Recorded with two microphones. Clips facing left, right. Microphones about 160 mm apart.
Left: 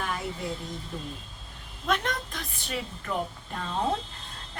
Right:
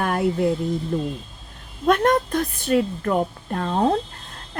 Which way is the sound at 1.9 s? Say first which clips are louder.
Right 11 dB; 50° right (ahead or behind).